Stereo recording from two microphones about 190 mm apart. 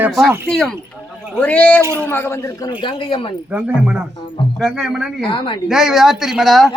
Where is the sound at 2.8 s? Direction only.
25° left (ahead or behind).